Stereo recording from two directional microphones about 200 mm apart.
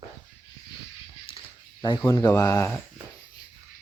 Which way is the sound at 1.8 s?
20° left (ahead or behind).